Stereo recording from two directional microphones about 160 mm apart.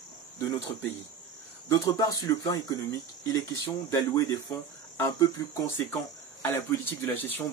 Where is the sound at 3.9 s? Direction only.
20° left (ahead or behind).